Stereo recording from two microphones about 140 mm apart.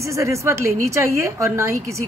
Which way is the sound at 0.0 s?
20° right (ahead or behind).